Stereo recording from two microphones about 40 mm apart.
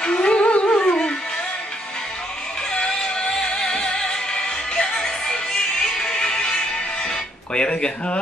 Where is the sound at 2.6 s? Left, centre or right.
Left.